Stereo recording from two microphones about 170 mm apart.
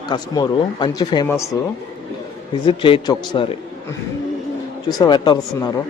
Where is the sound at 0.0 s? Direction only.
25° left (ahead or behind).